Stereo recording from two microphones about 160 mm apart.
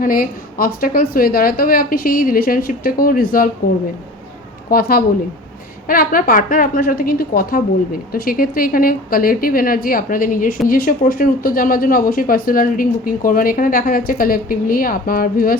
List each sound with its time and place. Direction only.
0.0 s a woman's voice: 60° left (ahead or behind)
4.7 s a woman's voice: 65° left (ahead or behind)